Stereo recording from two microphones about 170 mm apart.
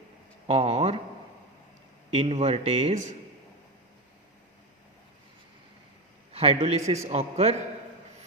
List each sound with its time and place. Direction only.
0.4 s speech: 35° right (ahead or behind)
2.0 s speech: 35° right (ahead or behind)
6.3 s speech: 35° right (ahead or behind)